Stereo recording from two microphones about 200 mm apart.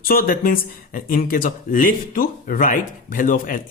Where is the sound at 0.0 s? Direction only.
45° left (ahead or behind).